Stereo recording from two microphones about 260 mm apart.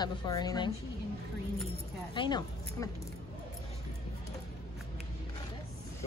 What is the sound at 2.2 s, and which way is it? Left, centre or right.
Speech, centre.